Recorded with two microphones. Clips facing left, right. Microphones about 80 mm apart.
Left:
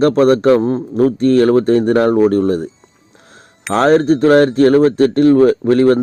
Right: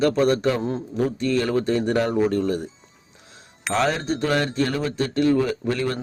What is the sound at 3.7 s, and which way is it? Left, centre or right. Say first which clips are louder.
A man's voice: left 11 dB; left.